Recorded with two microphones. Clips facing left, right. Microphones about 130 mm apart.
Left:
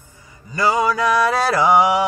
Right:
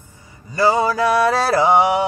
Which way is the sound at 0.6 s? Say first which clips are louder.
Right 2 dB; 30° right (ahead or behind).